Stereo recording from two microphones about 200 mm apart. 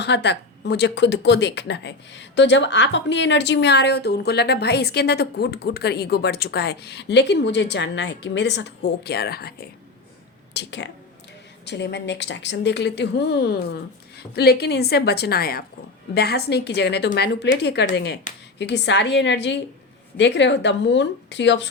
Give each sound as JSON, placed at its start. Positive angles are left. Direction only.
{"t": 0.0, "sound": "a woman's voice", "side_deg": 60}